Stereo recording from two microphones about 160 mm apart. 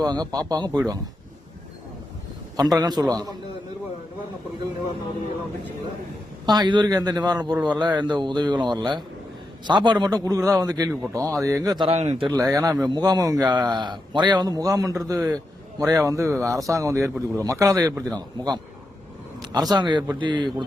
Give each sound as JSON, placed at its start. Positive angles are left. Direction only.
{"t": 0.0, "sound": "a man's voice", "side_deg": -25}
{"t": 2.6, "sound": "a man's voice", "side_deg": -25}
{"t": 6.4, "sound": "a man's voice", "side_deg": -25}
{"t": 11.9, "sound": "speech", "side_deg": -40}
{"t": 12.4, "sound": "a man's voice", "side_deg": -20}